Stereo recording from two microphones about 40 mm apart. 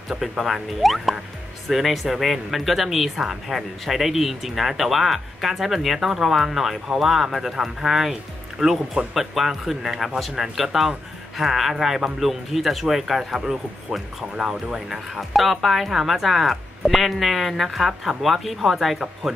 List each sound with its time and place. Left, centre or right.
0.2 s speech: centre
14.9 s speech: centre